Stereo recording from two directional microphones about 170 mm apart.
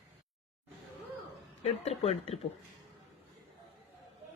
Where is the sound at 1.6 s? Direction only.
40° left (ahead or behind).